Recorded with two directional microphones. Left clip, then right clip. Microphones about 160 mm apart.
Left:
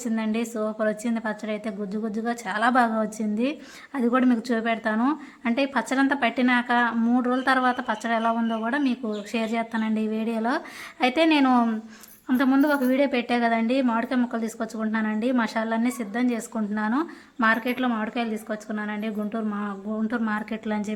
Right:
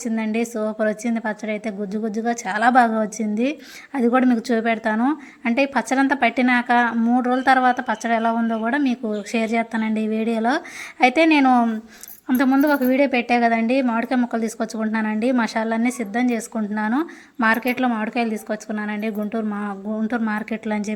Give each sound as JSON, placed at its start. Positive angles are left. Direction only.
{"t": 0.0, "sound": "a woman's voice", "side_deg": -15}